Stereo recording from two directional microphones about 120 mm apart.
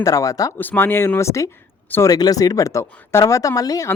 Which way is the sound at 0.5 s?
15° left (ahead or behind).